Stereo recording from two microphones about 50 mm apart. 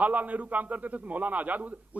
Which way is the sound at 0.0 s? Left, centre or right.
Right.